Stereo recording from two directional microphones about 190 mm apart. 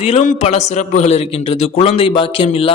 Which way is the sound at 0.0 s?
35° left (ahead or behind).